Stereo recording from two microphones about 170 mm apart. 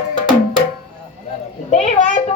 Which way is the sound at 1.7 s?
45° left (ahead or behind).